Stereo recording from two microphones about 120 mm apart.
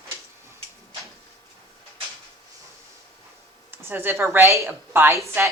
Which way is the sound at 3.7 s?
15° right (ahead or behind).